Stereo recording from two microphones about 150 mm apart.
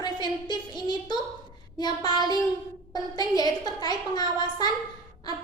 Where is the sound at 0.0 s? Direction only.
30° left (ahead or behind).